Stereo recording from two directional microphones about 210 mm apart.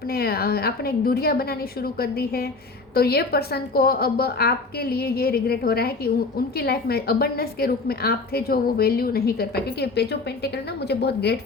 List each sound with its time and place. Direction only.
0.1 s a woman's voice: 45° left (ahead or behind)